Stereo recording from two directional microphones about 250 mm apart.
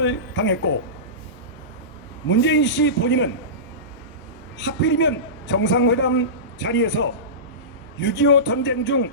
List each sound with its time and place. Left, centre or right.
0.0 s a man's voice: left
2.2 s a man's voice: left
4.5 s a man's voice: left